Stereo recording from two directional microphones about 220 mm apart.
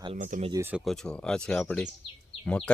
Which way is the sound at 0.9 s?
5° left (ahead or behind).